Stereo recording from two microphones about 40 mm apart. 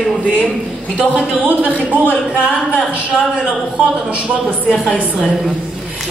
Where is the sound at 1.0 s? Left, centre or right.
Right.